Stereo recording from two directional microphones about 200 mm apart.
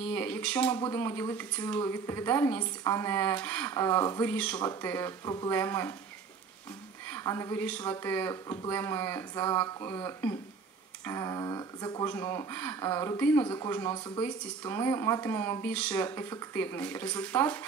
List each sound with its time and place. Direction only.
0.0 s a sound: 10° left (ahead or behind)
0.7 s speech: 15° left (ahead or behind)
7.1 s speech: 15° left (ahead or behind)
13.9 s speech: 20° left (ahead or behind)